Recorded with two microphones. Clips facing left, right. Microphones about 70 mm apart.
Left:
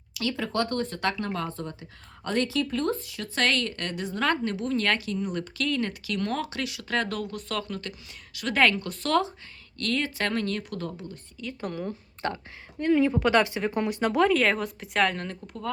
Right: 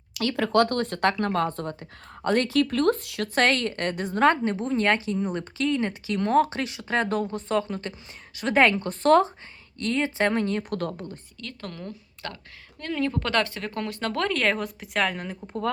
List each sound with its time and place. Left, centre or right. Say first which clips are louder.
0.1 s speech: right 6 dB; right
2.6 s speech: right 5 dB; right
3.3 s a woman's voice: right 3 dB; right
4.3 s speech: right 4 dB; right
9.7 s speech: right 3 dB; right
10.6 s speech: right 5 dB; right
11.3 s speech: left 6 dB; centre